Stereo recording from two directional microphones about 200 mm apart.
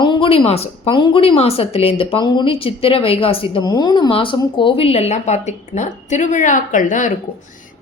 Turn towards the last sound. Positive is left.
turn(degrees=40)  # may be behind; listen again after turning